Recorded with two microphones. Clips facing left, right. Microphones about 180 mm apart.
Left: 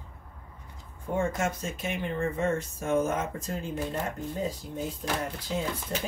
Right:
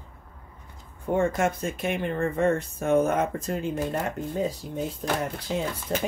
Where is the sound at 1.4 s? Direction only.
55° right (ahead or behind).